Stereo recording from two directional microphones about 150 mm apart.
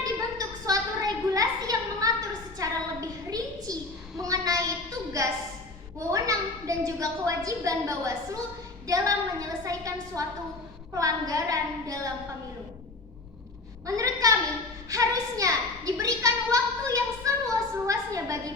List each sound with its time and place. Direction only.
0.0 s a sound: 25° right (ahead or behind)
6.1 s a woman's voice: 20° right (ahead or behind)
13.8 s a woman's voice: 25° right (ahead or behind)